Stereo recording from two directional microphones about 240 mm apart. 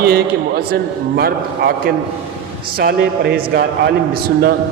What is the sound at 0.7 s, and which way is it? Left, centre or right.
A man's voice, right.